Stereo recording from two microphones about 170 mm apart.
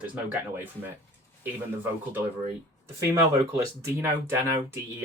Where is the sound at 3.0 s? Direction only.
15° right (ahead or behind).